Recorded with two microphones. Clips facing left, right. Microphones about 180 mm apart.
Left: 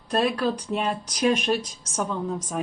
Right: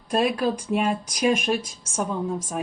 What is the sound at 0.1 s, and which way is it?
Speech, 10° right (ahead or behind).